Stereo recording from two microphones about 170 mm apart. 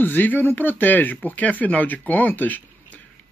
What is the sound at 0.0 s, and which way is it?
Speech, 10° left (ahead or behind).